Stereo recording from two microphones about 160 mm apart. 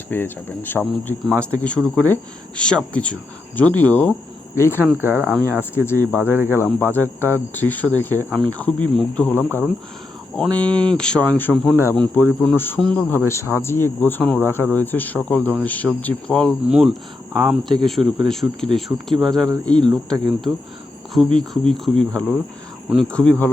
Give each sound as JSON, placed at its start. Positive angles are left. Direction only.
{"t": 0.1, "sound": "speech", "side_deg": 10}
{"t": 4.9, "sound": "speech", "side_deg": -15}
{"t": 5.7, "sound": "speech", "side_deg": 15}
{"t": 16.6, "sound": "speech", "side_deg": -5}
{"t": 19.1, "sound": "speech", "side_deg": -30}
{"t": 19.6, "sound": "speech", "side_deg": 5}
{"t": 20.5, "sound": "speech", "side_deg": -15}
{"t": 21.3, "sound": "speech", "side_deg": 5}